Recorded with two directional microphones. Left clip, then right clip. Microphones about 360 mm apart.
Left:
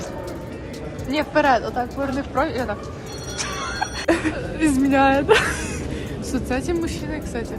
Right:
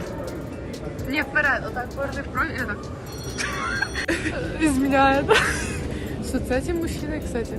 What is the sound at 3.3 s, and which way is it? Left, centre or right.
Music, centre.